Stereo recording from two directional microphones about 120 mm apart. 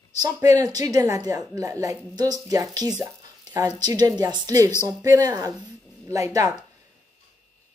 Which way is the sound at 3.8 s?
30° right (ahead or behind).